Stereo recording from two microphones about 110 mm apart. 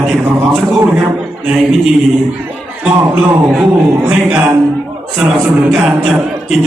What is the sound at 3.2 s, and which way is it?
A man's voice, 10° right (ahead or behind).